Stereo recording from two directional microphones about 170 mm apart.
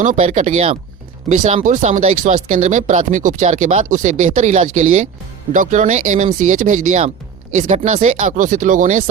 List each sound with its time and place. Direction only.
0.0 s speech: 45° right (ahead or behind)